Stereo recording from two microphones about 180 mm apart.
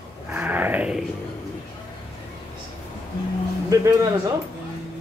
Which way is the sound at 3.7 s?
20° right (ahead or behind).